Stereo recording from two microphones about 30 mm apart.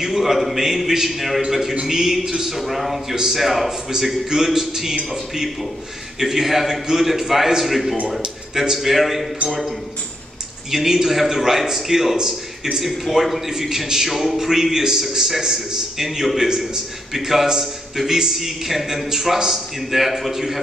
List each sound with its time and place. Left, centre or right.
0.0 s a man's voice: centre
10.7 s a man's voice: centre
13.5 s a man's voice: centre